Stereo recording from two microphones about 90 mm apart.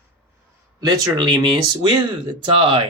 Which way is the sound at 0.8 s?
45° right (ahead or behind).